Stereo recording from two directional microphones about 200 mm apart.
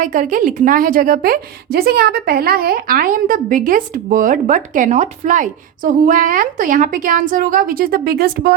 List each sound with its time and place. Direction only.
0.0 s a woman's voice: 40° right (ahead or behind)